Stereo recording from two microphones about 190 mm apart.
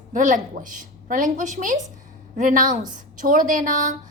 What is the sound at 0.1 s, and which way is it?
A woman's voice, 40° right (ahead or behind).